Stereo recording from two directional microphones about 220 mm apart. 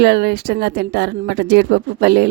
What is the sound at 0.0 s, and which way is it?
Speech, 50° right (ahead or behind).